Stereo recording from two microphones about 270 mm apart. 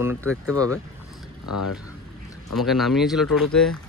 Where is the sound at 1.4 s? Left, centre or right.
Left.